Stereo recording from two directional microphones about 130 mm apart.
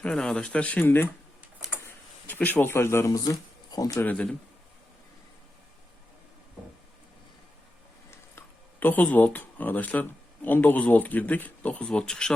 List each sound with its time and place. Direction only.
0.0 s speech: 5° left (ahead or behind); by 4.0 s 30° left (ahead or behind)
4.0 s speech: 10° left (ahead or behind)
8.4 s speech: 15° left (ahead or behind)